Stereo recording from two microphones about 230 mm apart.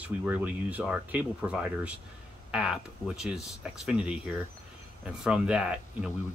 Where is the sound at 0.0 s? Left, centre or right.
Centre.